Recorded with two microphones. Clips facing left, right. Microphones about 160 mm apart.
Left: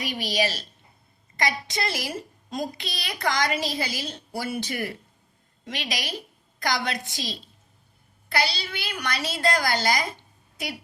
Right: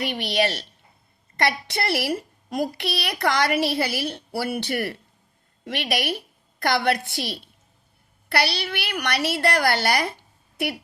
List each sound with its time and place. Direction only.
0.0 s a woman's voice: 65° right (ahead or behind)